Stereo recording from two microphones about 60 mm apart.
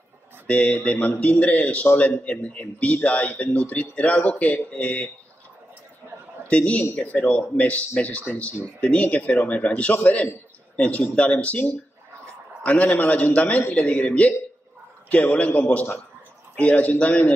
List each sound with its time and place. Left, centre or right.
0.5 s speech: left
6.5 s a man's voice: left